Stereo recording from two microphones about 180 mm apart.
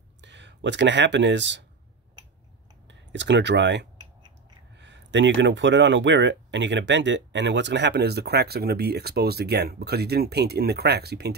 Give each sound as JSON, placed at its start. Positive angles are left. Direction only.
{"t": 0.2, "sound": "speech", "side_deg": -80}
{"t": 2.9, "sound": "speech", "side_deg": -80}